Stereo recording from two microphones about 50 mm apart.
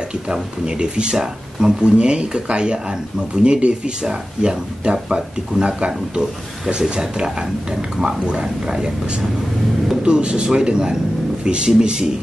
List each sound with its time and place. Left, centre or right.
0.1 s speech: centre